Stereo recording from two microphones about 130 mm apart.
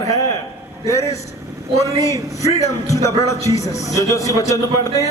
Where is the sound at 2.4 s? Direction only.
25° left (ahead or behind).